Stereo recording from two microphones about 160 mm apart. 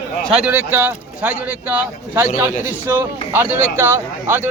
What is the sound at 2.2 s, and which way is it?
Speech, 55° left (ahead or behind).